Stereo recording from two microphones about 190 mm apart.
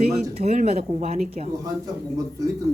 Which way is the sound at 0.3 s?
35° right (ahead or behind).